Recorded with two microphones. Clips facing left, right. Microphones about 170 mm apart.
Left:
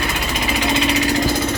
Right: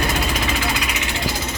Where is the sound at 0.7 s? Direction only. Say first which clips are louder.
Left 9 dB; 30° left (ahead or behind).